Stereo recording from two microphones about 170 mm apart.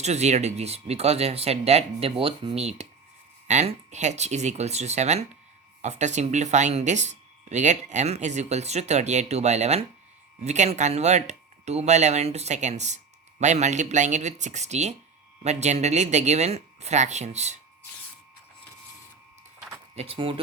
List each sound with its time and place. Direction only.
0.0 s speech: 40° right (ahead or behind)
3.4 s speech: 40° right (ahead or behind)
20.0 s speech: 35° right (ahead or behind)